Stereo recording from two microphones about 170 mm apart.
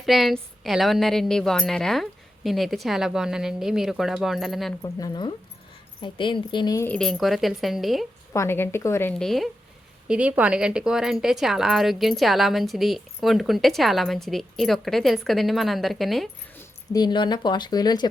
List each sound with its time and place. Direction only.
0.0 s speech: centre (ahead or behind)
4.8 s speech: 20° left (ahead or behind)
6.8 s speech: 5° left (ahead or behind)
8.3 s speech: 15° left (ahead or behind)
16.9 s speech: 25° left (ahead or behind)